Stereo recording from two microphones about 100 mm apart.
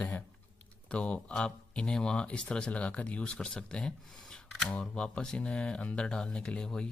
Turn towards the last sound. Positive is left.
turn(degrees=10)  # may be behind; listen again after turning